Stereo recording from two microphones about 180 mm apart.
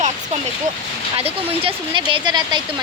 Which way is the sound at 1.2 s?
30° right (ahead or behind).